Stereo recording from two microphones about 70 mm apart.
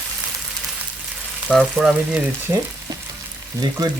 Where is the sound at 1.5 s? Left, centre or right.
Centre.